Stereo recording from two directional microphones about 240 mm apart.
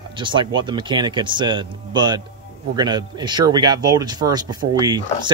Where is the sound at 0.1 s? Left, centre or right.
Centre.